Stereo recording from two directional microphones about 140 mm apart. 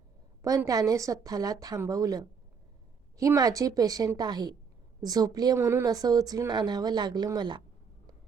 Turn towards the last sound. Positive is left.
turn(degrees=-30)  # may be behind; listen again after turning